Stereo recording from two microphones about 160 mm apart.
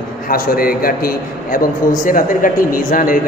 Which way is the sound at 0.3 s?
65° left (ahead or behind).